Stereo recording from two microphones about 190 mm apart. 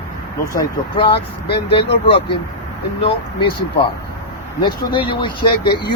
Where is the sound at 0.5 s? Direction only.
25° left (ahead or behind).